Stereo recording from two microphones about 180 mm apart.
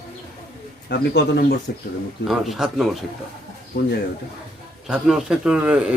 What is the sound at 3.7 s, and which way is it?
Speech, 60° left (ahead or behind).